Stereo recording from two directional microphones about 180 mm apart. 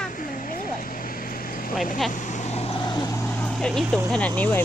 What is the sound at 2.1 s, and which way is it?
Speech, 40° left (ahead or behind).